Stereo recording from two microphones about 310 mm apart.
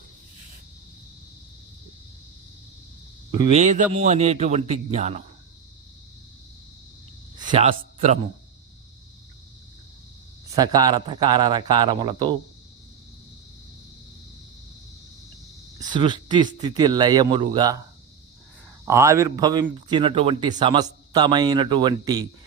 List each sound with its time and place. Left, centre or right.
3.3 s speech: centre
7.3 s speech: centre
10.5 s a man's voice: centre
15.9 s a man's voice: centre
18.9 s a man's voice: centre